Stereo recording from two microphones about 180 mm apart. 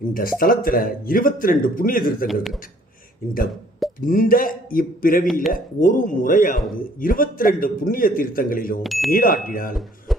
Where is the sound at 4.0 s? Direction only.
50° left (ahead or behind).